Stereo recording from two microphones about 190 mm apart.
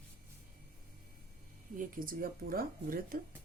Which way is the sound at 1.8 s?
45° right (ahead or behind).